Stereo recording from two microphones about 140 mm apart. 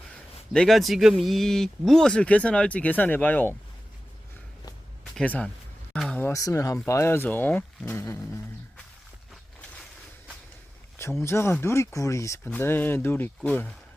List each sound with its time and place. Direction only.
0.5 s speech: 5° left (ahead or behind)
5.1 s speech: 10° left (ahead or behind)
6.2 s speech: 20° left (ahead or behind)
11.2 s speech: 20° left (ahead or behind)